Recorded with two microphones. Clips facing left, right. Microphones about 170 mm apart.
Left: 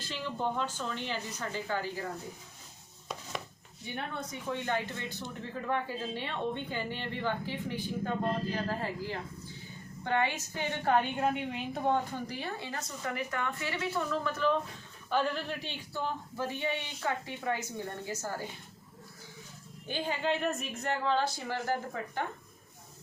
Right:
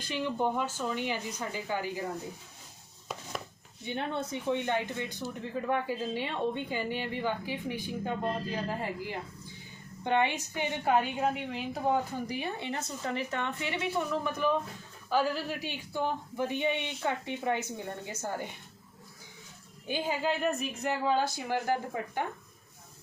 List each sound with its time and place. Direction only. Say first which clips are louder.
0.1 s a woman's voice: right 4 dB; 15° right (ahead or behind)
3.8 s a woman's voice: right 5 dB; 25° right (ahead or behind)
19.9 s a woman's voice: right 1 dB; 5° right (ahead or behind)